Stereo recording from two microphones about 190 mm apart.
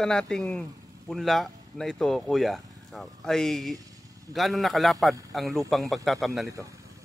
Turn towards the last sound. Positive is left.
turn(degrees=0)  # may be behind; listen again after turning